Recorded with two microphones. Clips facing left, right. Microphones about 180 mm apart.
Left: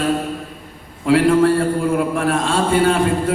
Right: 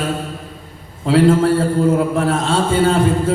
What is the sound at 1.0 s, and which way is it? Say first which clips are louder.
A man's voice: even; 25° right (ahead or behind).